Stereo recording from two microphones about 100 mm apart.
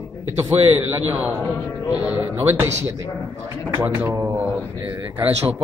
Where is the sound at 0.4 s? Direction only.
25° right (ahead or behind).